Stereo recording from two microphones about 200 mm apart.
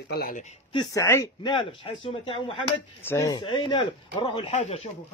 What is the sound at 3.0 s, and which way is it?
Speech, 15° left (ahead or behind).